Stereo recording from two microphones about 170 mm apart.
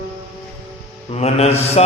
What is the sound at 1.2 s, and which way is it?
Mantra, 40° left (ahead or behind).